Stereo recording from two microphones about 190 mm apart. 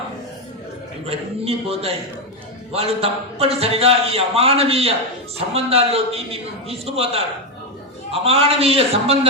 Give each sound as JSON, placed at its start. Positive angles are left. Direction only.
{"t": 1.0, "sound": "a man's voice", "side_deg": -30}